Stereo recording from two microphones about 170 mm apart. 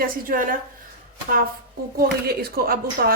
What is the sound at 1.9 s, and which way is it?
A woman's voice, 65° right (ahead or behind).